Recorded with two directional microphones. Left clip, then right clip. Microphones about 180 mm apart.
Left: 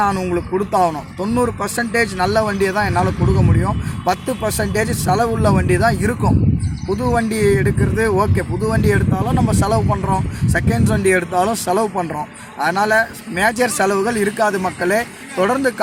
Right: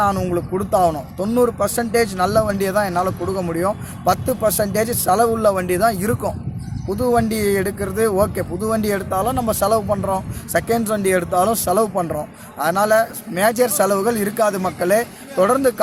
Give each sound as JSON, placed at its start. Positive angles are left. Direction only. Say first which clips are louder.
{"t": 0.0, "sound": "speech", "louder": "left 1 dB", "side_deg": -35}